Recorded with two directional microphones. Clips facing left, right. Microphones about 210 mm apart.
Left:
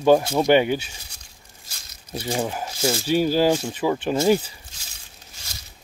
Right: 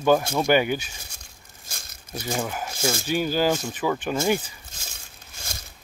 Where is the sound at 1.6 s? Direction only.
50° right (ahead or behind).